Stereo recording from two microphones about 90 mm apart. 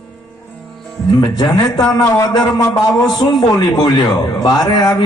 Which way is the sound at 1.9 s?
45° left (ahead or behind).